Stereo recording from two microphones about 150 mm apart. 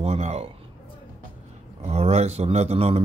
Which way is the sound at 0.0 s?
45° right (ahead or behind).